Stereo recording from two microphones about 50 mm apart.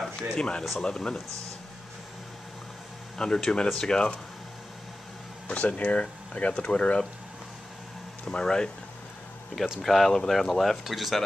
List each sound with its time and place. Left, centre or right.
0.4 s speech: centre
3.2 s speech: centre
5.5 s speech: left
8.3 s speech: centre
9.8 s speech: centre
10.8 s speech: centre